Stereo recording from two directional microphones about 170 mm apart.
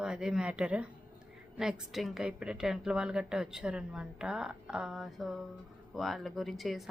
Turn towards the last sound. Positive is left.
turn(degrees=0)  # may be behind; listen again after turning